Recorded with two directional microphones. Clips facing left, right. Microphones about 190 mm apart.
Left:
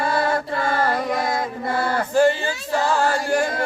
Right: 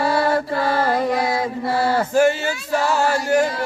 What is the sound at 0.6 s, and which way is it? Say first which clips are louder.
Carnatic music: right 2 dB; 45° left (ahead or behind).